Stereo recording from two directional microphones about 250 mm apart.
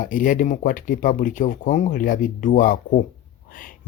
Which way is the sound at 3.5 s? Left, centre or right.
Left.